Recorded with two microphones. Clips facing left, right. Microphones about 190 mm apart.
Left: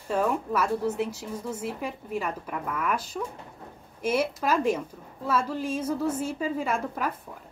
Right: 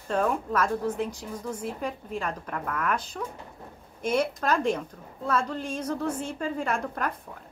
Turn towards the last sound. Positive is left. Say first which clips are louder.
# left 1 dB
turn(degrees=5)  # may be behind; listen again after turning